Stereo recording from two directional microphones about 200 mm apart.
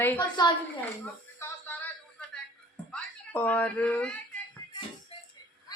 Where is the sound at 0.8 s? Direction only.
10° left (ahead or behind).